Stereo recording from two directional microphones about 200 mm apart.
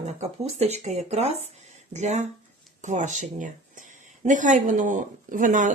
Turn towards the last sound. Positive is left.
turn(degrees=-40)  # may be behind; listen again after turning